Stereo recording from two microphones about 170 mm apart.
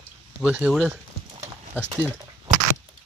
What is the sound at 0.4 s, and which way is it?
Speech, 5° right (ahead or behind).